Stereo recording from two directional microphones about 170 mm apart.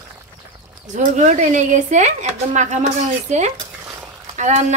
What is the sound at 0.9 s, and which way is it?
A woman's voice, 45° right (ahead or behind).